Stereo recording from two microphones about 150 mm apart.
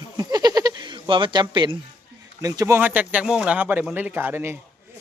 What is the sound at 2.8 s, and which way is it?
Speech, 10° right (ahead or behind).